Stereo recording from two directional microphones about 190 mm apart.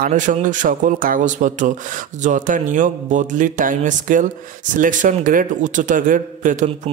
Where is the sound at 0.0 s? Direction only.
40° right (ahead or behind).